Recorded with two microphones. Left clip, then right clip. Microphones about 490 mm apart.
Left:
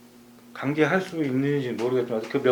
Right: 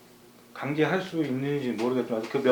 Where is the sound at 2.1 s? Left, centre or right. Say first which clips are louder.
Left 2 dB; centre.